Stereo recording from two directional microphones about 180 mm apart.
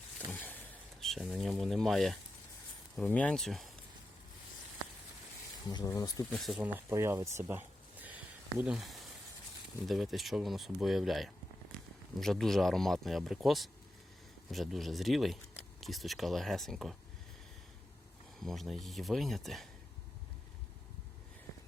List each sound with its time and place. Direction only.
0.3 s a sound: 10° left (ahead or behind)
2.9 s speech: 5° left (ahead or behind)
5.6 s speech: 20° left (ahead or behind)
6.3 s speech: centre (ahead or behind)
18.3 s speech: centre (ahead or behind)